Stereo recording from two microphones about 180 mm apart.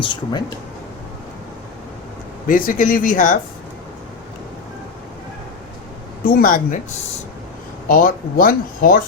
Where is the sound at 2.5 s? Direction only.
50° left (ahead or behind).